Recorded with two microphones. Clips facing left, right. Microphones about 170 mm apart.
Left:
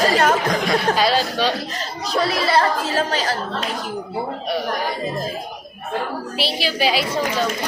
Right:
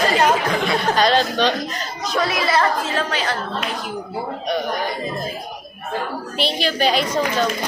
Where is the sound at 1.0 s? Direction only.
5° left (ahead or behind).